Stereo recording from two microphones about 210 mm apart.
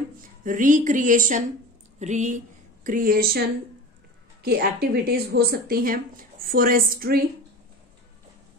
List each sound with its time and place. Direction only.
0.2 s a woman's voice: 40° right (ahead or behind)